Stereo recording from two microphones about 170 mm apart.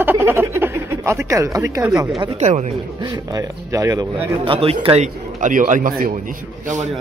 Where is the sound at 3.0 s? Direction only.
25° right (ahead or behind).